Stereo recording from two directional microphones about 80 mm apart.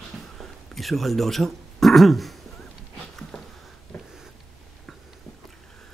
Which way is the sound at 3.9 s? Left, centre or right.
Centre.